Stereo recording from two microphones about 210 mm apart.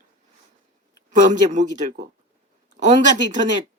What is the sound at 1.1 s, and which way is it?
Speech, 35° right (ahead or behind).